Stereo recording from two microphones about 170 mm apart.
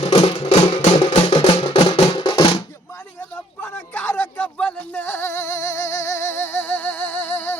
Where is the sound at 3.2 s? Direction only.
10° left (ahead or behind).